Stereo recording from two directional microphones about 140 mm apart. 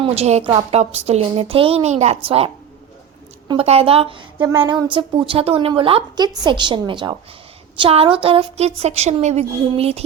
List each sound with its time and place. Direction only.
0.0 s a woman's voice: 45° right (ahead or behind)
0.4 s a woman's voice: 35° right (ahead or behind)
0.8 s a woman's voice: 50° right (ahead or behind)
3.5 s a woman's voice: 45° right (ahead or behind)